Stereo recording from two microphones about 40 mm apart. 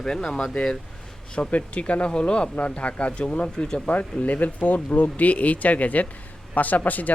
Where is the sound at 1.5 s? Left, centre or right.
Left.